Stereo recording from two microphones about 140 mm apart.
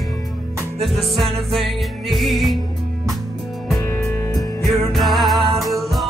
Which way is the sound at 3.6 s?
Centre (ahead or behind).